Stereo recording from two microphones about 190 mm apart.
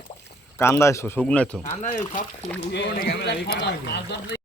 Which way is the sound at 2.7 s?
60° left (ahead or behind).